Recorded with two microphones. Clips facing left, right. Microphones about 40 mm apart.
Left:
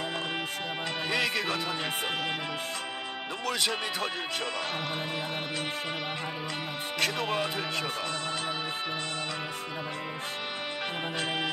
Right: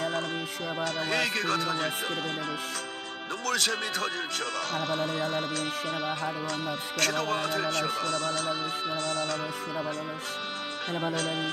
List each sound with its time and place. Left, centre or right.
1.1 s music: left
3.4 s speech: left
7.0 s speech: left